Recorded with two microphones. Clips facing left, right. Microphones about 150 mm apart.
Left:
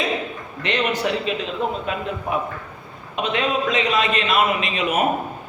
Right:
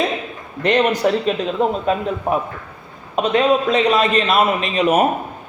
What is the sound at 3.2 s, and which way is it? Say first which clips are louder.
A man's voice: right 6 dB; 35° right (ahead or behind).